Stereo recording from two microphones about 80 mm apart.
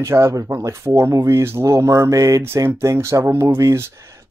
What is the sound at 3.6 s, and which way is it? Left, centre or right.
Speech, right.